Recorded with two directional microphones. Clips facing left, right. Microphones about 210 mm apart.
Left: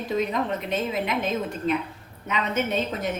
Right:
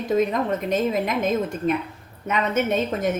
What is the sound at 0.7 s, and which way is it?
A woman's voice, 45° right (ahead or behind).